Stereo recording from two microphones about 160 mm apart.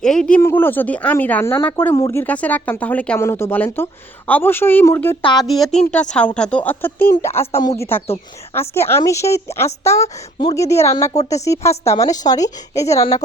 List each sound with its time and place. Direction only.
0.0 s speech: 5° left (ahead or behind)
5.2 s speech: 25° left (ahead or behind)
5.9 s speech: 5° left (ahead or behind)